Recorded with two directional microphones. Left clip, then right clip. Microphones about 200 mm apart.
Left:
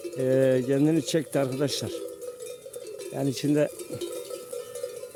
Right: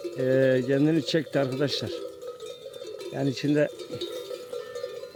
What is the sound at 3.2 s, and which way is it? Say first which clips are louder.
Speech: even; 5° left (ahead or behind).